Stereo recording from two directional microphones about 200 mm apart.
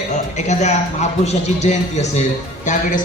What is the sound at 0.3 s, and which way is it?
A man's voice, 35° left (ahead or behind).